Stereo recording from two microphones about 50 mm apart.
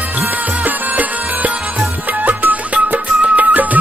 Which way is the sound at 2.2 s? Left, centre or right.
Right.